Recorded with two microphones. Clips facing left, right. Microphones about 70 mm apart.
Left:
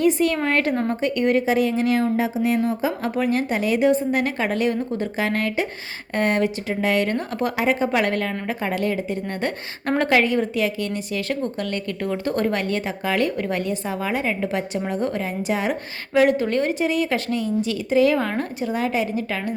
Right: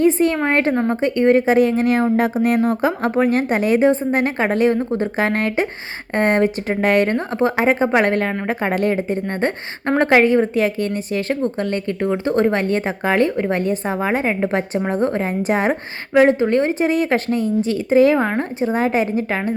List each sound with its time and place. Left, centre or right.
0.0 s a woman's voice: right
7.3 s a woman's voice: right
16.1 s a woman's voice: right